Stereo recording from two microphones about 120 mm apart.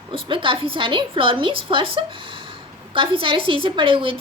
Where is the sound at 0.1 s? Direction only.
45° right (ahead or behind).